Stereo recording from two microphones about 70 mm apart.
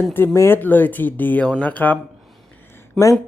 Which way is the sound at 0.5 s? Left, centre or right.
Left.